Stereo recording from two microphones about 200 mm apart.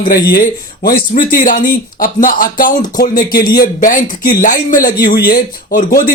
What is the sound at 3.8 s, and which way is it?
A man's voice, 40° left (ahead or behind).